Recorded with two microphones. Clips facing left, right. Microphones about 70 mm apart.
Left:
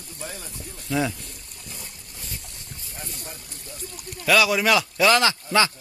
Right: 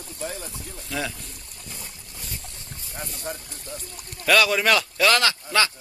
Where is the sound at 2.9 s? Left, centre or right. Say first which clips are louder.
Right 6 dB; right.